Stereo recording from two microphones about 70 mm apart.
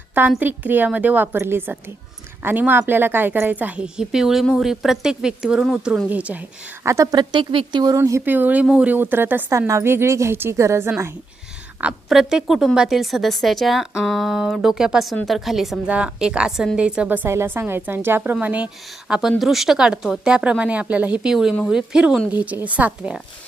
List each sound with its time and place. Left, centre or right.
0.1 s a woman's voice: right
6.8 s a woman's voice: right
7.7 s speech: right
7.9 s a woman's voice: right
8.2 s a woman's voice: right
9.0 s a woman's voice: right
9.5 s a woman's voice: right
12.0 s a woman's voice: centre
15.9 s a woman's voice: centre
17.2 s a woman's voice: right
18.3 s a woman's voice: centre
21.2 s a woman's voice: centre
22.3 s a woman's voice: right